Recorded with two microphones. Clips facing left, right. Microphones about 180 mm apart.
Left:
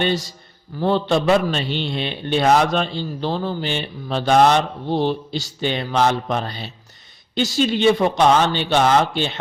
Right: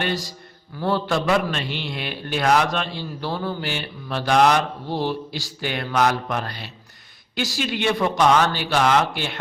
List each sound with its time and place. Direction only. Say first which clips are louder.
0.0 s speech: left 5 dB; 25° left (ahead or behind)